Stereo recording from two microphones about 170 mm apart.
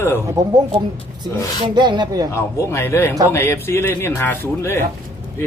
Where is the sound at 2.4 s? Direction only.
15° left (ahead or behind).